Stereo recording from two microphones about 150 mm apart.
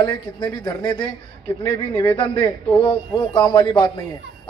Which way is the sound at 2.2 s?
35° left (ahead or behind).